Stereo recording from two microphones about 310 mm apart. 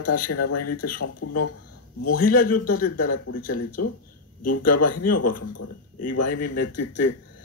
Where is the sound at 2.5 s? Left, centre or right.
Left.